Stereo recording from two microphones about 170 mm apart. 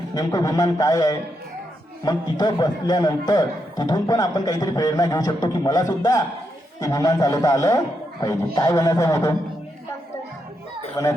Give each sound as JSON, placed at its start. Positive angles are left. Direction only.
{"t": 0.1, "sound": "a man's voice", "side_deg": 20}
{"t": 11.0, "sound": "a man's voice", "side_deg": 20}